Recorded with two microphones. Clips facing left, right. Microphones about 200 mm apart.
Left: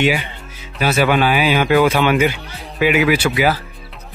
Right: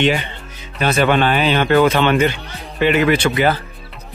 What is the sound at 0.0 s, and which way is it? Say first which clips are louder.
Speech: even; 10° left (ahead or behind).